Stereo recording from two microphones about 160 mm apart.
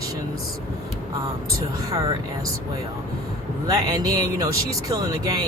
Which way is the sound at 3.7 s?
25° right (ahead or behind).